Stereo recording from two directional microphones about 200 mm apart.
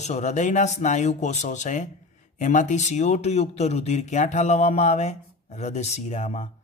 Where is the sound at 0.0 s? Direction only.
35° left (ahead or behind).